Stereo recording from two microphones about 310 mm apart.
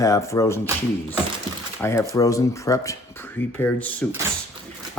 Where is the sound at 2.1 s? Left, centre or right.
Centre.